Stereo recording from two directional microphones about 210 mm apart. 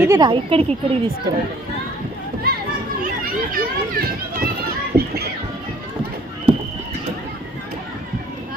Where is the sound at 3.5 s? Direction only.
45° right (ahead or behind).